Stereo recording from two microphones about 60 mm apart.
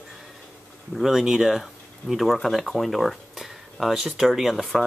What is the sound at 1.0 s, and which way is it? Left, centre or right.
Speech, centre.